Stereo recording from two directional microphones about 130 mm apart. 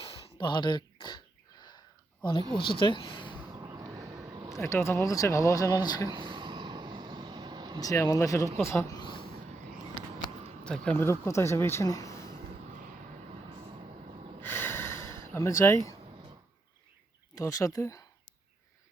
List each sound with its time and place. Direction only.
0.0 s a sound: 45° left (ahead or behind)
2.6 s speech: 40° left (ahead or behind)
3.5 s a sound: 25° right (ahead or behind)
4.6 s speech: 20° left (ahead or behind)
6.1 s vehicle: 35° right (ahead or behind)
7.8 s speech: 25° left (ahead or behind)
9.0 s a sound: 35° left (ahead or behind)
10.6 s speech: 10° left (ahead or behind)
11.0 s speech: 20° left (ahead or behind)
14.4 s snort: 15° left (ahead or behind)
15.2 s speech: 20° left (ahead or behind)
17.3 s speech: 25° left (ahead or behind)